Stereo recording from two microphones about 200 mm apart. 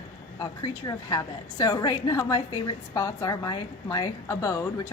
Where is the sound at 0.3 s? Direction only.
20° left (ahead or behind).